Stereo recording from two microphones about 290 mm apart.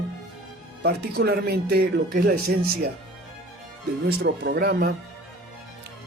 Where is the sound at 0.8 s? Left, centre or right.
Right.